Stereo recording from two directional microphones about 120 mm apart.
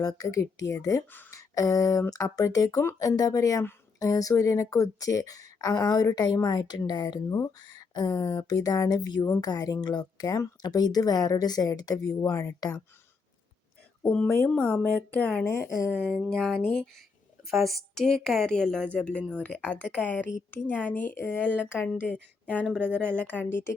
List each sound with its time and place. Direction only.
0.0 s speech: 30° left (ahead or behind)
7.3 s speech: 25° left (ahead or behind)
14.0 s speech: 10° left (ahead or behind)
15.4 s speech: 25° left (ahead or behind)
16.2 s speech: 5° left (ahead or behind)